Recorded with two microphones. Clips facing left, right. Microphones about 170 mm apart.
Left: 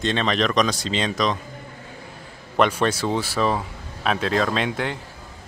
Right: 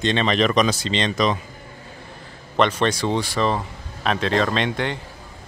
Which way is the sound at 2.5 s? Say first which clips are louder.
Even; 10° left (ahead or behind).